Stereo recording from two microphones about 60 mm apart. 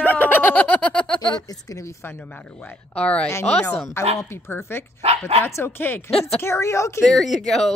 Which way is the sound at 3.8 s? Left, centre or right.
Left.